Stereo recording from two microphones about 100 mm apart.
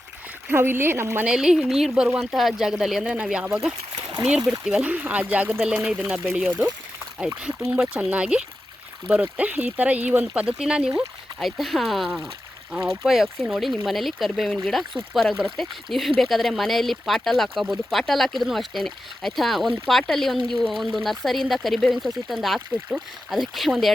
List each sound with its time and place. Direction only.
0.4 s speech: 25° right (ahead or behind)
1.2 s speech: 5° right (ahead or behind)
7.7 s speech: 10° right (ahead or behind)